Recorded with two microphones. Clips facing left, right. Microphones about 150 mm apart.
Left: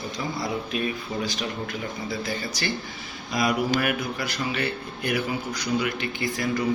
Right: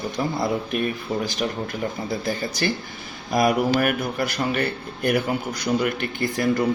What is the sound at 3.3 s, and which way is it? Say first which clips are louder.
Speech: right 4 dB; 50° right (ahead or behind).